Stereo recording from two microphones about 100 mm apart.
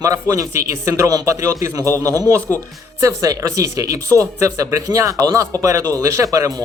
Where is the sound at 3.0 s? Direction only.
35° right (ahead or behind).